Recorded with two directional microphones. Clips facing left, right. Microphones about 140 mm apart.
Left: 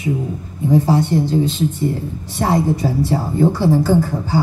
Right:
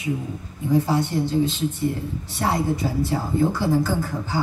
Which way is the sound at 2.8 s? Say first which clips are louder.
Left 5 dB; 35° left (ahead or behind).